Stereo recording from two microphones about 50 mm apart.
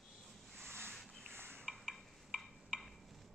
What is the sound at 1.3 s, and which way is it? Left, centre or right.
Dishes, right.